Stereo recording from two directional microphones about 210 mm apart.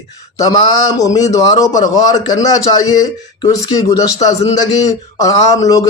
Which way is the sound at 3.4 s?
15° left (ahead or behind).